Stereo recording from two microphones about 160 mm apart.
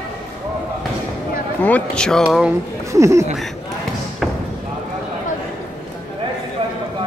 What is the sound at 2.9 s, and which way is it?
Speech, 20° right (ahead or behind).